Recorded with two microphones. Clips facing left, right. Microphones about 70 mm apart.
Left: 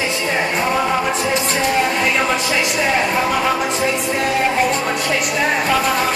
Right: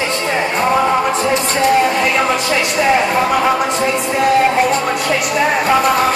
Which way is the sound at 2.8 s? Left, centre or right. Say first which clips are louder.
Right 6 dB; centre.